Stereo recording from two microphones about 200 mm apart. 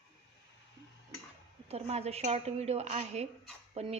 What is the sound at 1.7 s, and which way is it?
Speech, 30° right (ahead or behind).